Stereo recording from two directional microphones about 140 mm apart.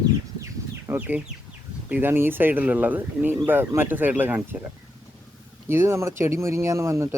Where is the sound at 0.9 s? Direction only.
10° right (ahead or behind).